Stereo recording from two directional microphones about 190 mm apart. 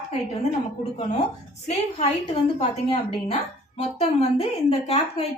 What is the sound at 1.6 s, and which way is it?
A woman's voice, 35° left (ahead or behind).